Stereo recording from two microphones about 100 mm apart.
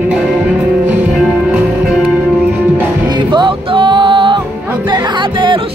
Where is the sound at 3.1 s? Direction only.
50° right (ahead or behind).